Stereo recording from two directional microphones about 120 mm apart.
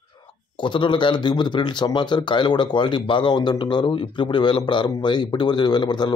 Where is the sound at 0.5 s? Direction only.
40° left (ahead or behind).